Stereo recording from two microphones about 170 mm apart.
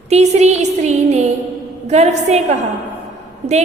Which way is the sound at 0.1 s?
40° right (ahead or behind).